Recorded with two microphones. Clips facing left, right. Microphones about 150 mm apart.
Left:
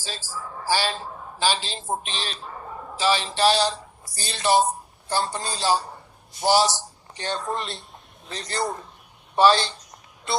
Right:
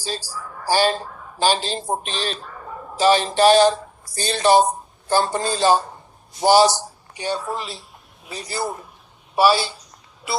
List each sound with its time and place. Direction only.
0.0 s a woman's voice: 40° right (ahead or behind); by 6.7 s 65° right (ahead or behind)
7.1 s a man's voice: 10° right (ahead or behind)